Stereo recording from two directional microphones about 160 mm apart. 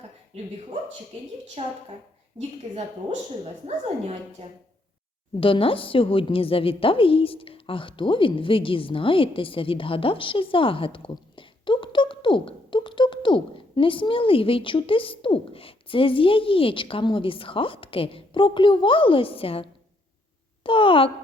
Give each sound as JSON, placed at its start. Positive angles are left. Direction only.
{"t": 1.6, "sound": "a woman's voice", "side_deg": -45}
{"t": 5.4, "sound": "a woman's voice", "side_deg": 35}